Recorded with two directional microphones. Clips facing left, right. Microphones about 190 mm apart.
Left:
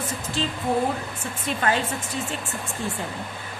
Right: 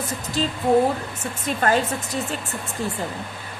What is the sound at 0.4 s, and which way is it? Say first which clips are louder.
Speech: right 4 dB; 40° right (ahead or behind).